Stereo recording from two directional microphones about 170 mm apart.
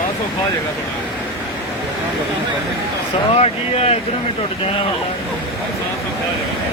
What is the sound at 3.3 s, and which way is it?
Speech, 35° left (ahead or behind).